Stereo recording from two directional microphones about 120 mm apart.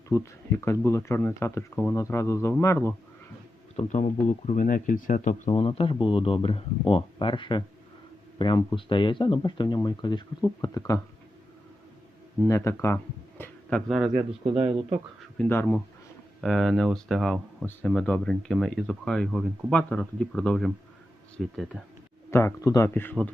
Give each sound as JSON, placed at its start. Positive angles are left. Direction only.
{"t": 0.1, "sound": "speech", "side_deg": 20}
{"t": 3.8, "sound": "speech", "side_deg": 80}
{"t": 5.5, "sound": "speech", "side_deg": 50}
{"t": 10.4, "sound": "speech", "side_deg": 25}
{"t": 12.5, "sound": "speech", "side_deg": 25}
{"t": 13.4, "sound": "a sound", "side_deg": 10}
{"t": 13.8, "sound": "speech", "side_deg": -5}
{"t": 15.4, "sound": "speech", "side_deg": 20}
{"t": 16.4, "sound": "speech", "side_deg": 0}
{"t": 22.3, "sound": "speech", "side_deg": 20}
{"t": 23.0, "sound": "speech", "side_deg": 10}